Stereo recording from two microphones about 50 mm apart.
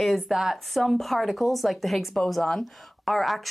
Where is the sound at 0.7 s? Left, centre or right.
Centre.